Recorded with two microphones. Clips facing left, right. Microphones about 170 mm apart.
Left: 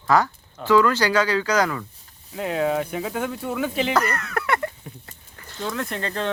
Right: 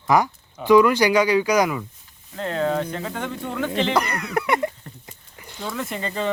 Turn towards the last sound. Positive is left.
turn(degrees=0)  # may be behind; listen again after turning